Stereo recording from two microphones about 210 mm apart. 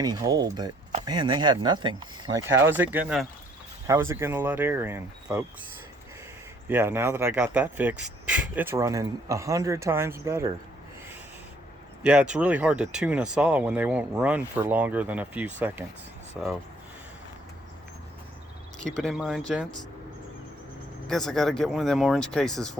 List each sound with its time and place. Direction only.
0.0 s speech: 20° right (ahead or behind)
6.7 s speech: 10° right (ahead or behind)
12.0 s speech: 5° right (ahead or behind)
18.9 s speech: centre (ahead or behind)
21.1 s speech: centre (ahead or behind)